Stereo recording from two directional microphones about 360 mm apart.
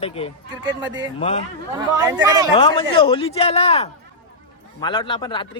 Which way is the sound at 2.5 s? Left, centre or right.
Centre.